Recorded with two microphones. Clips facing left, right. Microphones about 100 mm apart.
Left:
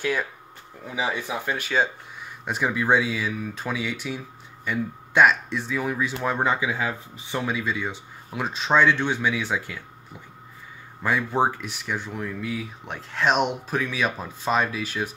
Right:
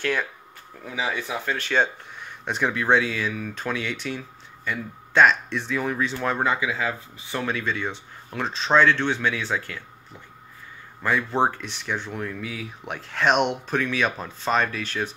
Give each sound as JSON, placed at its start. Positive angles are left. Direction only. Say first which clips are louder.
{"t": 0.0, "sound": "speech", "louder": "even", "side_deg": 10}
{"t": 1.0, "sound": "speech", "louder": "left 1 dB", "side_deg": 25}
{"t": 1.4, "sound": "speech", "louder": "right 1 dB", "side_deg": 10}
{"t": 6.1, "sound": "speech", "louder": "left 1 dB", "side_deg": 20}
{"t": 7.4, "sound": "speech", "louder": "right 1 dB", "side_deg": 5}
{"t": 11.0, "sound": "speech", "louder": "even", "side_deg": 10}